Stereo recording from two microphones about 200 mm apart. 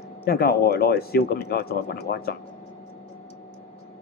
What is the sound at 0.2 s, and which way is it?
Speech, 50° left (ahead or behind).